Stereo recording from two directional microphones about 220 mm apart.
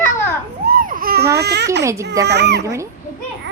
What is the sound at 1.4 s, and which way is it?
Speech, 50° right (ahead or behind).